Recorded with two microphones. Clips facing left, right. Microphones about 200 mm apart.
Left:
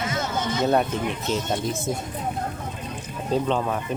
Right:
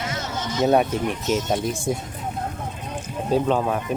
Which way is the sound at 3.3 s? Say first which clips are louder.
Right 3 dB; 10° right (ahead or behind).